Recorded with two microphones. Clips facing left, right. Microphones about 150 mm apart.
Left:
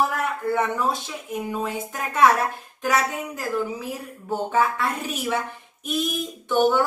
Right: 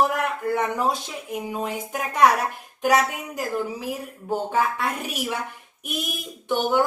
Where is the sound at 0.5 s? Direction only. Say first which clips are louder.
Left 1 dB; 15° right (ahead or behind).